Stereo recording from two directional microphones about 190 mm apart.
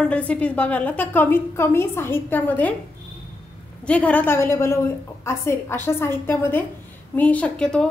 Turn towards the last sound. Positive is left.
turn(degrees=5)  # may be behind; listen again after turning